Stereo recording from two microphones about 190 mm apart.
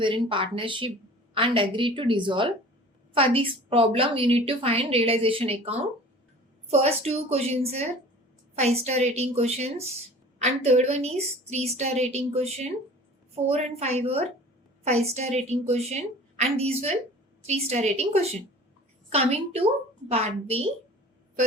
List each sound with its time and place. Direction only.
0.0 s a woman's voice: 25° right (ahead or behind)